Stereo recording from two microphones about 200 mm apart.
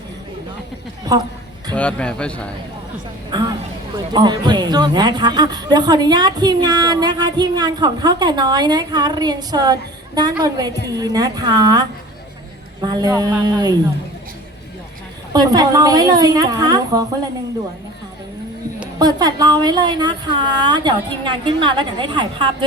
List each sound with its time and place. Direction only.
1.1 s a woman's voice: 20° right (ahead or behind)
1.7 s a man's voice: 5° left (ahead or behind)
3.3 s a man's voice: 20° right (ahead or behind)
10.8 s a man's voice: 20° right (ahead or behind)
15.3 s a man's voice: 20° right (ahead or behind)
18.9 s a man's voice: 20° right (ahead or behind)